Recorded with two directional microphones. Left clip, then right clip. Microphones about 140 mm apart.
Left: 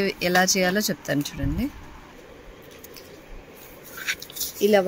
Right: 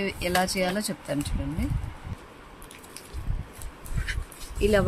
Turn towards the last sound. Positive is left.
turn(degrees=15)  # may be behind; listen again after turning